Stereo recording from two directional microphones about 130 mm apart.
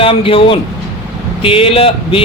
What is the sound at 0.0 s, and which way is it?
Speech, 45° left (ahead or behind).